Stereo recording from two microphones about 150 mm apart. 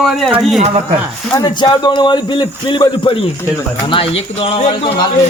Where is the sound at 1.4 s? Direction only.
30° left (ahead or behind).